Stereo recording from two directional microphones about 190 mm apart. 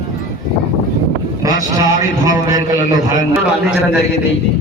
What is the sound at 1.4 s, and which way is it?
A man's voice, 15° right (ahead or behind).